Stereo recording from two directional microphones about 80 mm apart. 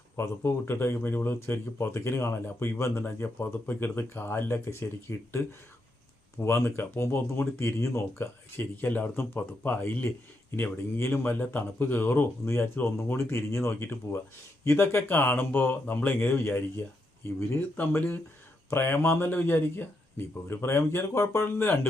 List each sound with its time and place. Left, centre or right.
0.2 s speech: left
6.4 s speech: left